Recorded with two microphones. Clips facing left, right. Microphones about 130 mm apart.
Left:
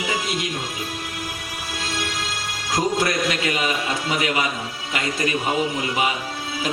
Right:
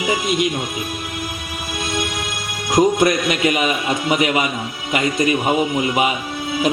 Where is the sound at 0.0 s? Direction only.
15° right (ahead or behind).